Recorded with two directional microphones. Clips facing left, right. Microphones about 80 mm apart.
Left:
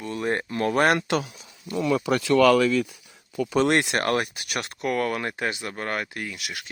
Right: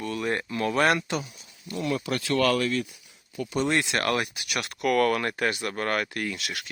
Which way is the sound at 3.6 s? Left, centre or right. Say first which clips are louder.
Left 4 dB; left.